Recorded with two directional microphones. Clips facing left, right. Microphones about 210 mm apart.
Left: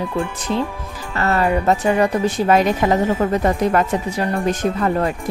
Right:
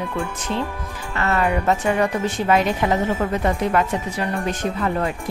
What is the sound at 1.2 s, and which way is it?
Speech, 35° left (ahead or behind).